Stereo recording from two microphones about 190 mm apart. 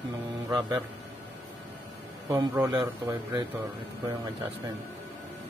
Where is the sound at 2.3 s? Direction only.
15° right (ahead or behind).